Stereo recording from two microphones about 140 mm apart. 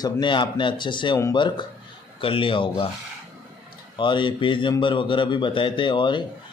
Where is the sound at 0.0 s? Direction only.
35° left (ahead or behind).